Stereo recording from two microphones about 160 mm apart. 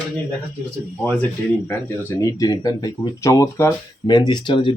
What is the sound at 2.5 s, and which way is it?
Speech, 25° left (ahead or behind).